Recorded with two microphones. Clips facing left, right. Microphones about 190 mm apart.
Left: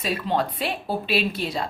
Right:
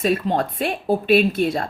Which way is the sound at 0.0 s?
50° right (ahead or behind).